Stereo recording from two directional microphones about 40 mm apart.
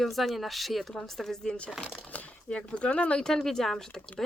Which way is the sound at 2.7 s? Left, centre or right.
Left.